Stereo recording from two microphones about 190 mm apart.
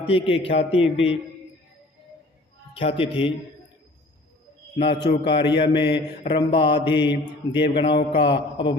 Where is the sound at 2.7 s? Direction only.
30° left (ahead or behind).